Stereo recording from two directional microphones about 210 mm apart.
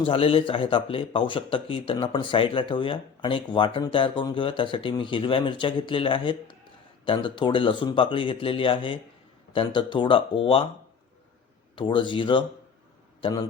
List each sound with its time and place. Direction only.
0.0 s a man's voice: 25° left (ahead or behind)
11.8 s a man's voice: 25° left (ahead or behind)